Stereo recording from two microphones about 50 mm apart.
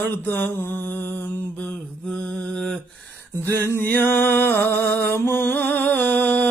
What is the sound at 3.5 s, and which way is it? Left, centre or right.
Music, left.